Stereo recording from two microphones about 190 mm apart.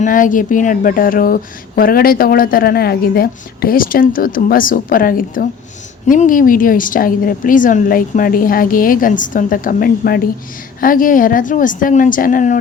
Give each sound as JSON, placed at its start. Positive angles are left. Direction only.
{"t": 0.0, "sound": "speech", "side_deg": 45}